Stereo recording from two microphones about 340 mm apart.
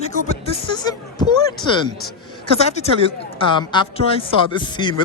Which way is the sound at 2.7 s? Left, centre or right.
Centre.